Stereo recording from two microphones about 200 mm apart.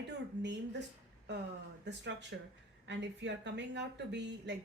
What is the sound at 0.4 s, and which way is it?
Speech, 60° right (ahead or behind).